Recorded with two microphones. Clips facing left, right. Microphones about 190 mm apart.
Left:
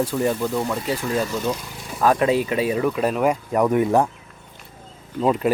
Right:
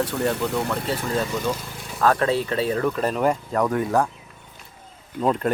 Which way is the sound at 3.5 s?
20° left (ahead or behind).